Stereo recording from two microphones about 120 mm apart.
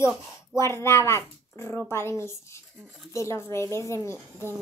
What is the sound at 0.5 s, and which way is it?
A child's voice, 20° left (ahead or behind).